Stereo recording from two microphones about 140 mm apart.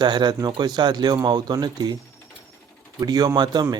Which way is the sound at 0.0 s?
30° right (ahead or behind).